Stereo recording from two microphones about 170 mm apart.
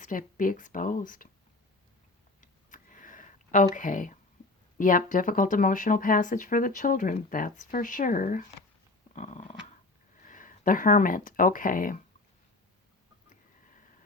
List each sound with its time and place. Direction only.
0.0 s speech: 50° left (ahead or behind)
2.4 s a sound: 50° left (ahead or behind)
3.8 s speech: 50° left (ahead or behind)
10.2 s speech: 50° left (ahead or behind)